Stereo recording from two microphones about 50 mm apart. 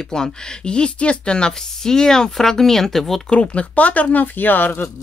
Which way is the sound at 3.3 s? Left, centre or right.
Left.